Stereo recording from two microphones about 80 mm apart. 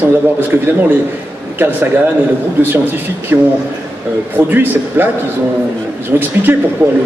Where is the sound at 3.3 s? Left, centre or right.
Right.